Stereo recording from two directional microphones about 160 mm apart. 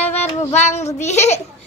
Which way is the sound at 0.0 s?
45° left (ahead or behind).